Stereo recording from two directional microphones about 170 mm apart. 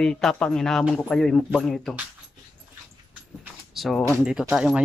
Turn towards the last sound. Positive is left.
turn(degrees=-5)  # may be behind; listen again after turning